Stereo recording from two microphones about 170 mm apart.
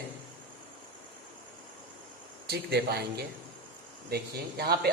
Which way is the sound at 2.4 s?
70° right (ahead or behind).